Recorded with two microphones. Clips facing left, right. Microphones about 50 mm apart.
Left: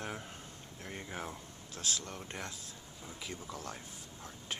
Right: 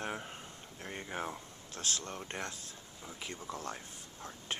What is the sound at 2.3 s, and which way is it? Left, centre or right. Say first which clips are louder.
Speech: right 2 dB; right.